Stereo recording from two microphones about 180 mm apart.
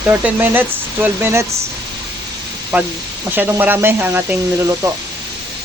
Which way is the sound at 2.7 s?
10° right (ahead or behind).